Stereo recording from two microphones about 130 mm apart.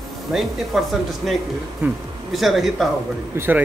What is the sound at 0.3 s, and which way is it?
Speech, centre (ahead or behind).